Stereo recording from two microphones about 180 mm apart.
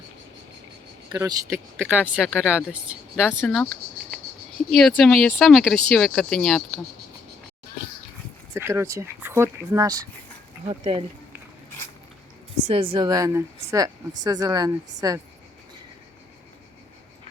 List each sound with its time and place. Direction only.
1.1 s speech: 15° right (ahead or behind)
3.2 s speech: 5° left (ahead or behind)
4.7 s speech: 5° left (ahead or behind)
8.5 s speech: 15° right (ahead or behind)
10.7 s speech: 30° right (ahead or behind)
12.5 s a woman's voice: 35° right (ahead or behind)